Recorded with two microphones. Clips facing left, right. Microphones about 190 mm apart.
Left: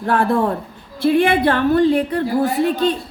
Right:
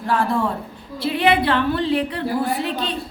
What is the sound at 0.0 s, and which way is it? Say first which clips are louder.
A woman's voice: left 4 dB; 55° left (ahead or behind).